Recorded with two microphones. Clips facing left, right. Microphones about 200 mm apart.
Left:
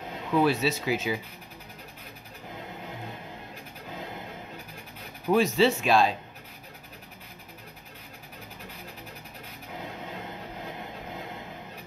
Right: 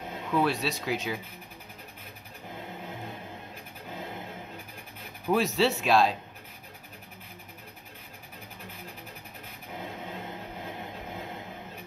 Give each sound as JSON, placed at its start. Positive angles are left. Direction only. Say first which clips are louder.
{"t": 0.3, "sound": "speech", "louder": "left 3 dB", "side_deg": 0}
{"t": 5.2, "sound": "speech", "louder": "left 3 dB", "side_deg": 0}